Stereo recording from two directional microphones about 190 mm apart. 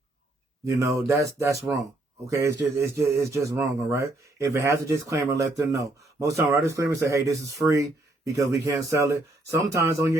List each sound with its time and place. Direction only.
0.6 s speech: 15° right (ahead or behind)
2.8 s speech: 15° right (ahead or behind)